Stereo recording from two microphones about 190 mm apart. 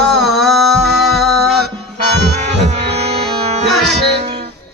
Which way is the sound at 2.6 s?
35° right (ahead or behind).